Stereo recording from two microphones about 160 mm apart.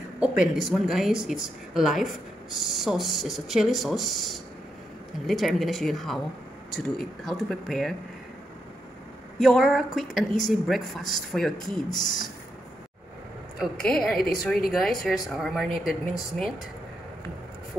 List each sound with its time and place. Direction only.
0.2 s speech: 5° right (ahead or behind)
7.2 s speech: centre (ahead or behind)
9.4 s speech: centre (ahead or behind)
13.6 s speech: 5° left (ahead or behind)
14.1 s speech: 65° left (ahead or behind)
14.7 s speech: centre (ahead or behind)